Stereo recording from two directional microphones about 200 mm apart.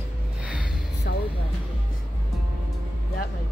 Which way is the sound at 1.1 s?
55° left (ahead or behind).